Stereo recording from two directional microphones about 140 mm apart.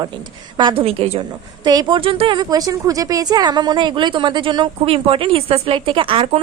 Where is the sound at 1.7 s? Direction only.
30° right (ahead or behind).